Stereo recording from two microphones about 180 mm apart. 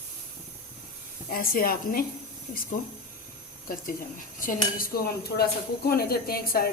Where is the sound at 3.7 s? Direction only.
50° left (ahead or behind).